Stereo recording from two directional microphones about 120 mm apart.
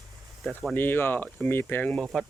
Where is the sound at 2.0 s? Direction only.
Centre (ahead or behind).